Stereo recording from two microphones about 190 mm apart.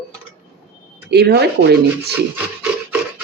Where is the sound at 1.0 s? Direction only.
60° right (ahead or behind).